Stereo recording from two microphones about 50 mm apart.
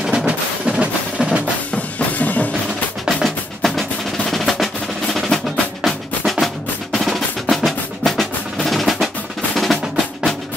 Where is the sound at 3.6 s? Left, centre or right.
Centre.